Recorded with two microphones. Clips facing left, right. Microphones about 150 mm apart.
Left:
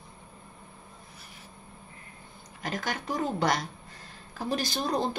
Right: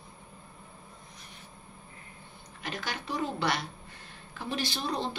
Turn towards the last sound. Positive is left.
turn(degrees=45)  # may be behind; listen again after turning